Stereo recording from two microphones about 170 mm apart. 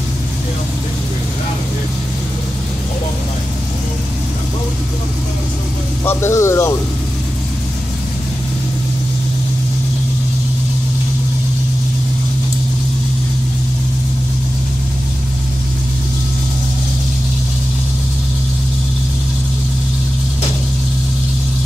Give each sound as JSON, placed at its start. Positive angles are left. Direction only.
{"t": 6.0, "sound": "speech", "side_deg": 15}